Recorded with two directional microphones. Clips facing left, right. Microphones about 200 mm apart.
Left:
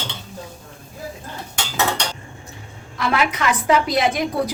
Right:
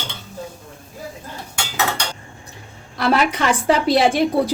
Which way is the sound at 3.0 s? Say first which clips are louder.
Right 3 dB; 35° right (ahead or behind).